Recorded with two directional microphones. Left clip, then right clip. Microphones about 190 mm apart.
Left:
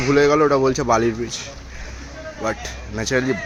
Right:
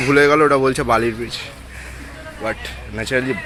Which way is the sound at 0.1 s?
Centre (ahead or behind).